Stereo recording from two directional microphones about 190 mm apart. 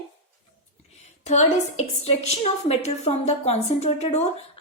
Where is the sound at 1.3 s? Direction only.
35° left (ahead or behind).